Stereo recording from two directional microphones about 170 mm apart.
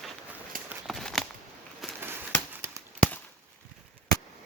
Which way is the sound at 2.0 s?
15° right (ahead or behind).